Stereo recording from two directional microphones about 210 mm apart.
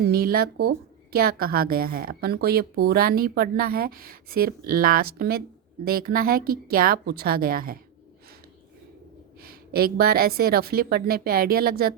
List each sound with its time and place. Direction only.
0.0 s a woman's voice: 45° right (ahead or behind)
9.4 s a woman's voice: 45° right (ahead or behind)